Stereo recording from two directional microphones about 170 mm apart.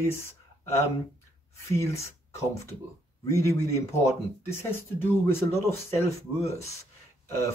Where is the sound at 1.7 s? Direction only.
15° left (ahead or behind).